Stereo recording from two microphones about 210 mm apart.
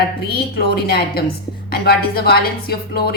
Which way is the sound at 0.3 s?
50° left (ahead or behind).